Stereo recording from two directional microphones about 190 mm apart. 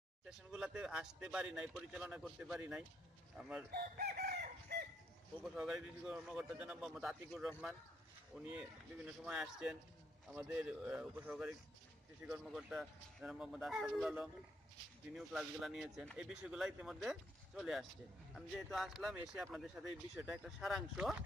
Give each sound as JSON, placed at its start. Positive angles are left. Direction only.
{"t": 0.3, "sound": "speech", "side_deg": -5}
{"t": 3.7, "sound": "chicken", "side_deg": -55}
{"t": 5.4, "sound": "speech", "side_deg": -5}